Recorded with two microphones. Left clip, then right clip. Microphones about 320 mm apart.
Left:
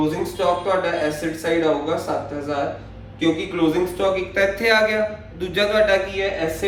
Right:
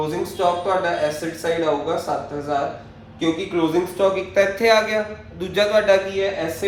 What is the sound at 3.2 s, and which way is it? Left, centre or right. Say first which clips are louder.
A man's voice: left 1 dB; centre.